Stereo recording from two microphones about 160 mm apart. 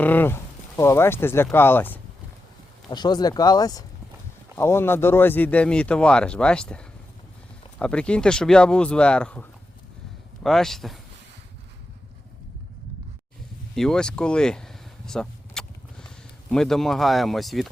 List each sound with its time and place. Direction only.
0.0 s speech: 10° left (ahead or behind)
2.9 s speech: 25° left (ahead or behind); by 10.9 s centre (ahead or behind)
13.7 s a sound: 5° left (ahead or behind)